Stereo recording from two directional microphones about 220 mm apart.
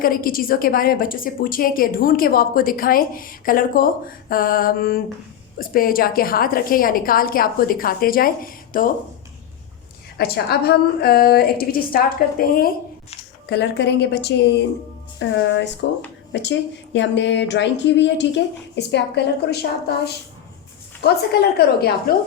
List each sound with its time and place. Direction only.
0.0 s a woman's voice: 40° left (ahead or behind)
10.2 s a woman's voice: 45° left (ahead or behind)
21.6 s a woman's voice: 45° left (ahead or behind)